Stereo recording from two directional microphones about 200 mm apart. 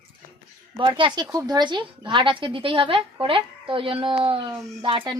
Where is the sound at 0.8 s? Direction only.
25° right (ahead or behind).